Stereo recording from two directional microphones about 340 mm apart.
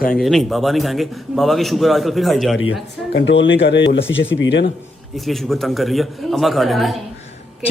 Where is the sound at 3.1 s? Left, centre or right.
Left.